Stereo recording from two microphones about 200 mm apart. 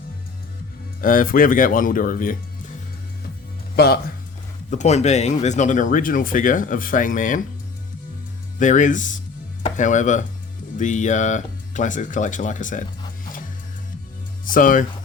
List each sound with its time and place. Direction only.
1.0 s speech: 45° left (ahead or behind)
3.8 s speech: 55° left (ahead or behind)
4.7 s speech: 35° left (ahead or behind)
8.5 s speech: 40° left (ahead or behind)
14.4 s speech: 45° left (ahead or behind)